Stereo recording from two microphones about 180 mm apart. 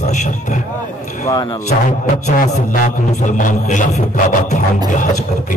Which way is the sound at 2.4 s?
45° left (ahead or behind).